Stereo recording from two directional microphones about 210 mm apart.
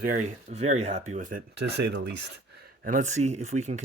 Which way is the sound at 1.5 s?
55° right (ahead or behind).